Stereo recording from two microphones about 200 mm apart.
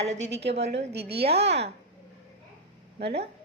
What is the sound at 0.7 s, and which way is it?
Speech, 60° right (ahead or behind).